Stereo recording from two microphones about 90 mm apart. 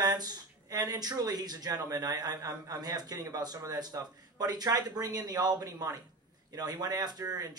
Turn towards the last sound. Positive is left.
turn(degrees=-45)  # may be behind; listen again after turning